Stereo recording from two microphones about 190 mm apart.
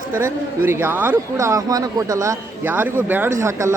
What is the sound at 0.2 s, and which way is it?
Speech, 10° right (ahead or behind).